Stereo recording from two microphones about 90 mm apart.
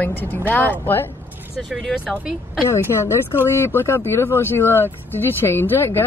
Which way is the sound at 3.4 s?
30° left (ahead or behind).